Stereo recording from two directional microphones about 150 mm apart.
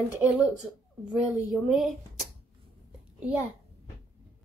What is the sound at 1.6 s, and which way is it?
Speech, centre (ahead or behind).